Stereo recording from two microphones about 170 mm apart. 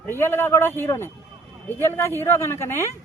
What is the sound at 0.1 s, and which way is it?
Speech, 15° left (ahead or behind).